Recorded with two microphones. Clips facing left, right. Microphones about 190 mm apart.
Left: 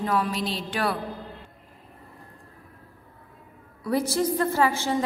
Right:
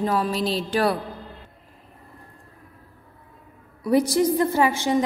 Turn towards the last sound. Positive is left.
turn(degrees=-15)  # may be behind; listen again after turning